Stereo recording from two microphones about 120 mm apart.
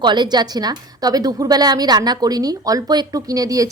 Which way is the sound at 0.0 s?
40° right (ahead or behind).